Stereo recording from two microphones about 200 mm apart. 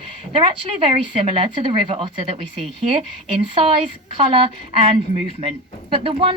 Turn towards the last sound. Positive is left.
turn(degrees=-25)  # may be behind; listen again after turning